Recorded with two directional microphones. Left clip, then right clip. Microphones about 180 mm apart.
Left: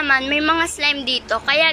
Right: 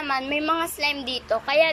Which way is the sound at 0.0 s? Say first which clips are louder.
Left 8 dB; 5° right (ahead or behind).